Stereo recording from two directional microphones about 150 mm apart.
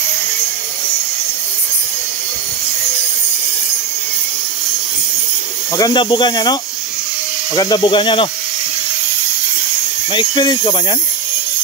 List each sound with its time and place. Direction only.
5.8 s speech: 30° left (ahead or behind)
10.1 s speech: 30° left (ahead or behind)